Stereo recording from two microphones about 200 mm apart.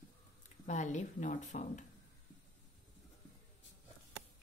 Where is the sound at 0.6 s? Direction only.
35° left (ahead or behind).